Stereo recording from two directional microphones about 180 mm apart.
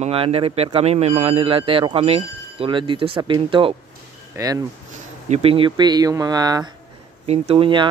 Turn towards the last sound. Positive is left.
turn(degrees=-30)  # may be behind; listen again after turning